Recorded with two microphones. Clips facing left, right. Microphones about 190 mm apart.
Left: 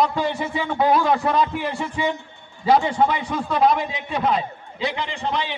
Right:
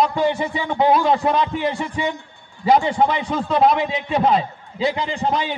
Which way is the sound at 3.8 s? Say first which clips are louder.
Right 4 dB; 30° right (ahead or behind).